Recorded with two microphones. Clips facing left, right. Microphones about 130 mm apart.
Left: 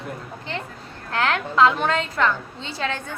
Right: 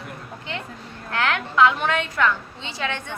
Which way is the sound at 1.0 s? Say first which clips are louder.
Left 1 dB; 35° left (ahead or behind).